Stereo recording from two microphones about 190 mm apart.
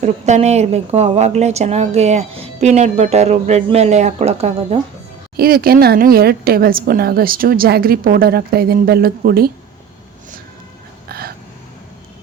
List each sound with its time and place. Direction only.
0.0 s speech: 35° right (ahead or behind)
5.4 s a woman's voice: 50° right (ahead or behind)
11.1 s a sound: 55° right (ahead or behind)